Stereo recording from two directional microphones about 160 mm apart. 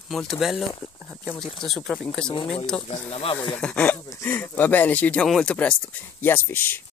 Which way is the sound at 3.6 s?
5° left (ahead or behind).